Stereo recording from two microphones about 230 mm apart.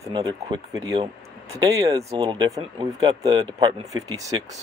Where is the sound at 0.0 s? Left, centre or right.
Centre.